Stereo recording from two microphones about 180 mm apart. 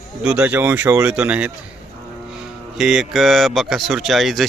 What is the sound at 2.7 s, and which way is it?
Speech, 5° right (ahead or behind).